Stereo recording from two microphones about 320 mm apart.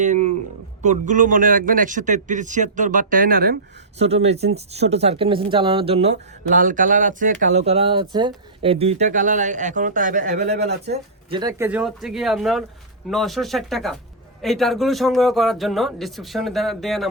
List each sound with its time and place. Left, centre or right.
0.0 s a man's voice: right
11.3 s a man's voice: centre